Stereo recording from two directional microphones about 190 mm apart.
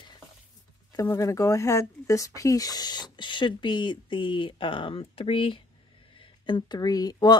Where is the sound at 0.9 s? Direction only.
15° left (ahead or behind).